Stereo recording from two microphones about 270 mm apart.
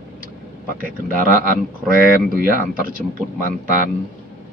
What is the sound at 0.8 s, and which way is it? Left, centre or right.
Speech, right.